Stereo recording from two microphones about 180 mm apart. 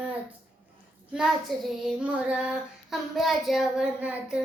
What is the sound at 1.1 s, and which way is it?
Child singing, 5° right (ahead or behind).